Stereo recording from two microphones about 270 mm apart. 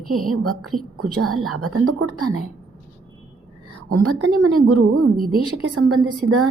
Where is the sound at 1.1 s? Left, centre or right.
Right.